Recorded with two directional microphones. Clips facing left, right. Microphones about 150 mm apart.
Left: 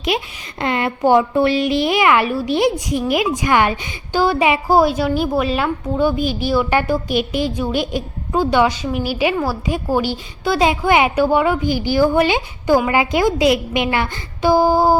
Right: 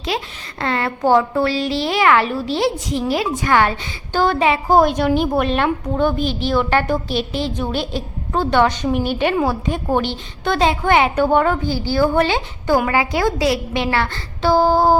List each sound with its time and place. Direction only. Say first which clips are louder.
0.1 s a woman's voice: left 2 dB; 20° left (ahead or behind)